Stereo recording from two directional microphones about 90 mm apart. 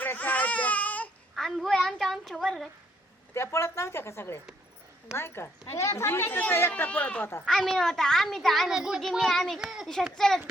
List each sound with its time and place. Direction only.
0.0 s baby cry: 20° left (ahead or behind)
1.4 s a sound: centre (ahead or behind)
3.3 s a woman's voice: 30° left (ahead or behind); by 7.3 s 15° left (ahead or behind)
7.4 s a woman's voice: 5° left (ahead or behind)